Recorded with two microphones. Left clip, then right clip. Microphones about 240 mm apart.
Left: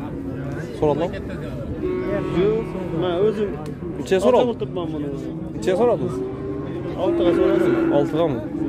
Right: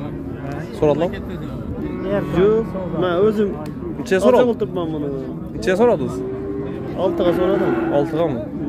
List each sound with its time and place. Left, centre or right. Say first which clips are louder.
0.7 s speech: right 3 dB; centre
2.3 s speech: right 5 dB; right
4.1 s a man's voice: right 2 dB; centre
4.5 s speech: right 4 dB; right
5.7 s speech: right 3 dB; centre
7.0 s speech: right 1 dB; right
8.0 s a man's voice: right 1 dB; centre